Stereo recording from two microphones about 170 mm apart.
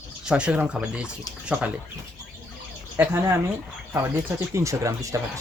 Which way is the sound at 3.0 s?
15° right (ahead or behind).